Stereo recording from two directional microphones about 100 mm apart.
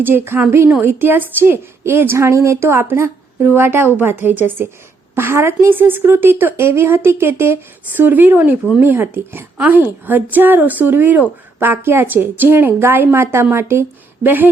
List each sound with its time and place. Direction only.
0.0 s a woman's voice: 20° right (ahead or behind)